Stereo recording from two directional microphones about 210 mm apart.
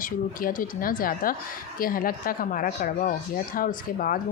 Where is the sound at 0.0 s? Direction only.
40° left (ahead or behind).